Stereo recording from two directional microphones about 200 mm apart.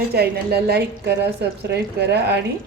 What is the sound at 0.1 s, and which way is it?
A woman's voice, 50° right (ahead or behind).